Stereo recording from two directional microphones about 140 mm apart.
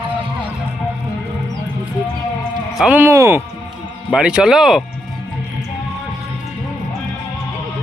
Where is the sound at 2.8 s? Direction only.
10° right (ahead or behind).